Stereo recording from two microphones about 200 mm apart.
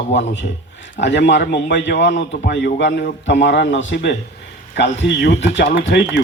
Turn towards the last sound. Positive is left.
turn(degrees=60)  # may be behind; listen again after turning